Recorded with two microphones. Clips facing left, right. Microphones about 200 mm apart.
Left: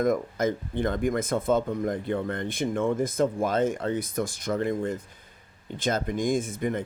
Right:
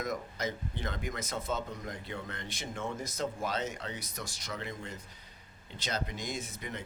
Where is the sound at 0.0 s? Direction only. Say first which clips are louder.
Left 11 dB; 50° left (ahead or behind).